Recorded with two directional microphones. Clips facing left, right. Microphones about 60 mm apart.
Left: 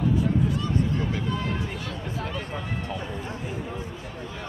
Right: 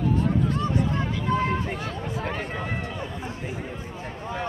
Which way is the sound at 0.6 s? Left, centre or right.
Right.